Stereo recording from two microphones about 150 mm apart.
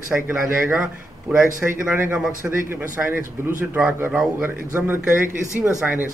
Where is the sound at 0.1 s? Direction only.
15° right (ahead or behind).